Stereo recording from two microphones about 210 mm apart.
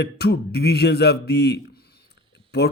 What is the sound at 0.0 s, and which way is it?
Speech, 50° left (ahead or behind).